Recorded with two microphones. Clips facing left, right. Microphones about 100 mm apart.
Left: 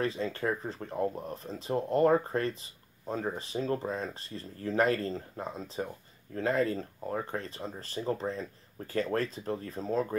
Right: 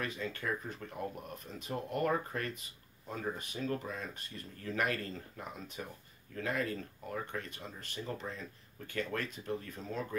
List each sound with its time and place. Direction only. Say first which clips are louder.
0.0 s speech: left 7 dB; 30° left (ahead or behind)